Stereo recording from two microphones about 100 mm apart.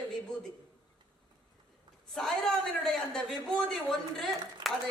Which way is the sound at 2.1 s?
5° left (ahead or behind).